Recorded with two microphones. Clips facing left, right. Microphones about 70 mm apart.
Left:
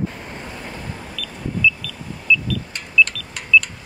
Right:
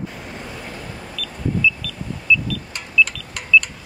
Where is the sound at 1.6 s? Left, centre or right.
Centre.